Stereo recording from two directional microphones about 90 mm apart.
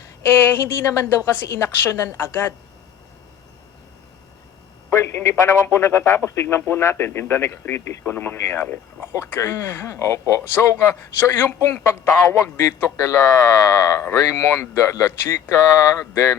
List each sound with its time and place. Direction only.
0.3 s a man's voice: 25° left (ahead or behind)
4.9 s a man's voice: 30° left (ahead or behind)